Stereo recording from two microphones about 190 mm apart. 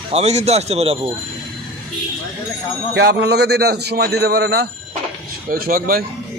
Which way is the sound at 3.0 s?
60° right (ahead or behind).